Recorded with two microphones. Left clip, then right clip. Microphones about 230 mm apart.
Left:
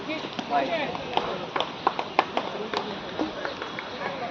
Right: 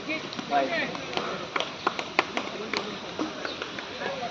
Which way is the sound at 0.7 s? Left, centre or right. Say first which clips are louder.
Left 1 dB; right.